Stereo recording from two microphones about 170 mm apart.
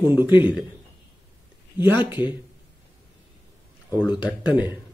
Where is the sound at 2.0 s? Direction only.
10° right (ahead or behind).